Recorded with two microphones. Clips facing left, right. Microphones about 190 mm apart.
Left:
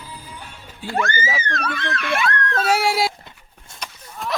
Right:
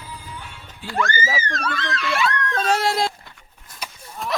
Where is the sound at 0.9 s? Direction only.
50° left (ahead or behind).